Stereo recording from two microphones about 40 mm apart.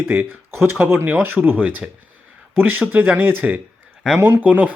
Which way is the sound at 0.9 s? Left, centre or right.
Right.